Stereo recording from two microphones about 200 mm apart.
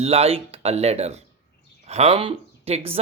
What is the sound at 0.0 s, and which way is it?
Speech, 30° right (ahead or behind).